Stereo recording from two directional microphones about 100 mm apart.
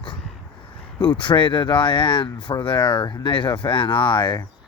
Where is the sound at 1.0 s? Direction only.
55° left (ahead or behind).